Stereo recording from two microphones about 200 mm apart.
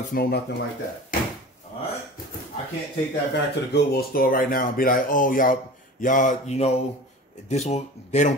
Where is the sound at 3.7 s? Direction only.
50° left (ahead or behind).